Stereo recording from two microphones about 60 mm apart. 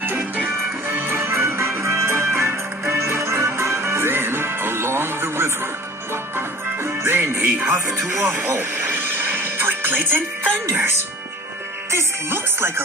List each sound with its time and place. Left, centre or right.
0.0 s music: right
7.9 s speech: right
8.5 s music: right
11.9 s speech: right